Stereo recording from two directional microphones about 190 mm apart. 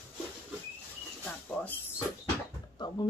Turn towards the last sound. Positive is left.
turn(degrees=20)  # may be behind; listen again after turning